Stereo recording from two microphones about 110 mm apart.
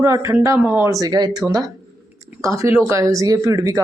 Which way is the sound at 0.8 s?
30° right (ahead or behind).